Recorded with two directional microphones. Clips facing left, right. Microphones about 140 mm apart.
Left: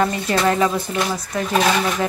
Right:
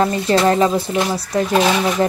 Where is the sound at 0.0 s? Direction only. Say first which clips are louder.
Right 4 dB; 30° right (ahead or behind).